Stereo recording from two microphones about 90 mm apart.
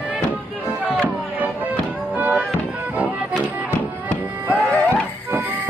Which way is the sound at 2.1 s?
15° right (ahead or behind).